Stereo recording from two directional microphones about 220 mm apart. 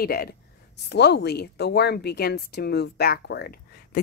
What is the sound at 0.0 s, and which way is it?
Speech, 45° left (ahead or behind).